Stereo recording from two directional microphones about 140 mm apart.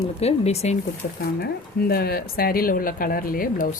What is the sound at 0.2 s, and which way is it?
Speech, 50° left (ahead or behind).